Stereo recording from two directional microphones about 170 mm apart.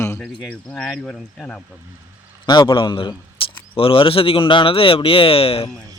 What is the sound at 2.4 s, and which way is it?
A man's voice, 25° left (ahead or behind).